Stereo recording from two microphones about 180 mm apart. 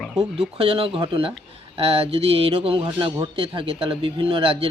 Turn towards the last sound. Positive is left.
turn(degrees=-30)  # may be behind; listen again after turning